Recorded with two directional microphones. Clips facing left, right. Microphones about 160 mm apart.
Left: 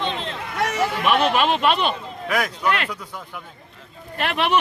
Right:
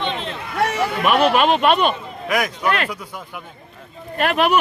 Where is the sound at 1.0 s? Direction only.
50° right (ahead or behind).